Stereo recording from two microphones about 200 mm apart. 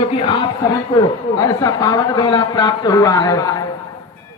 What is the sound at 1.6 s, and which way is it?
A man's voice, 15° left (ahead or behind).